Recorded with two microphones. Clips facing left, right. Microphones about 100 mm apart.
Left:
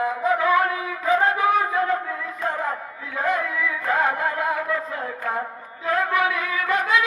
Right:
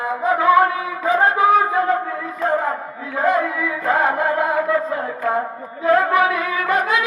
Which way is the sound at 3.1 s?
40° right (ahead or behind).